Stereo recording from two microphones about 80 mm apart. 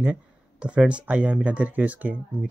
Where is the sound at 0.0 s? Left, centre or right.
Centre.